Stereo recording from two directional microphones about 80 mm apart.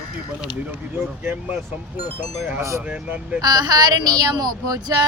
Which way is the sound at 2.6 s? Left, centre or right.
Right.